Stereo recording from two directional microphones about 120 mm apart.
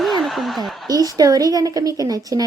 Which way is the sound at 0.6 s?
30° right (ahead or behind).